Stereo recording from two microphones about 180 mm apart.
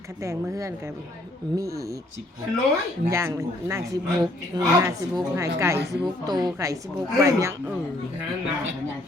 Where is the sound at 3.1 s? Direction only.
15° right (ahead or behind).